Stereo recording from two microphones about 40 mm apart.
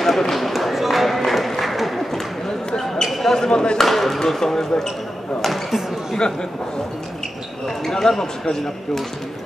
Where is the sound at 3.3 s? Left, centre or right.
Centre.